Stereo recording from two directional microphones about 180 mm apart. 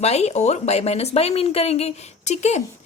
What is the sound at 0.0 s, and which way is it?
Speech, 35° left (ahead or behind).